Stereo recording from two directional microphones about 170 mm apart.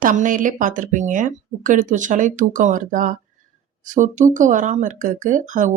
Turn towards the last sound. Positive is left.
turn(degrees=-50)  # may be behind; listen again after turning